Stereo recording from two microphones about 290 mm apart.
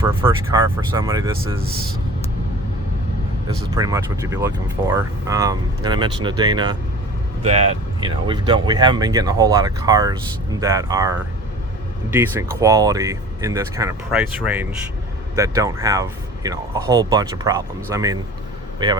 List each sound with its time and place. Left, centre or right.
0.0 s speech: centre
3.8 s speech: centre
12.1 s speech: centre